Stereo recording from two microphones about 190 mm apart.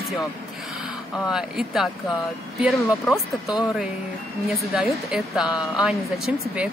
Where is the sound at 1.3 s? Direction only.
Centre (ahead or behind).